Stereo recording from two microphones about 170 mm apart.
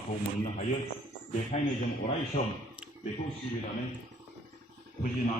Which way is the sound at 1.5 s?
40° left (ahead or behind).